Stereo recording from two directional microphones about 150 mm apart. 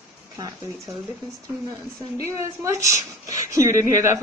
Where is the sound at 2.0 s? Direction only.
20° right (ahead or behind).